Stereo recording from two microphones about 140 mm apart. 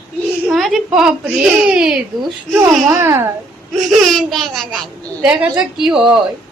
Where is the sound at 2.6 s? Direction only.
15° right (ahead or behind).